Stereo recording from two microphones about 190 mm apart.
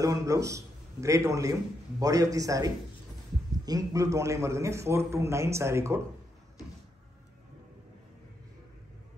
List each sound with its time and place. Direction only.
0.0 s a man's voice: 15° right (ahead or behind)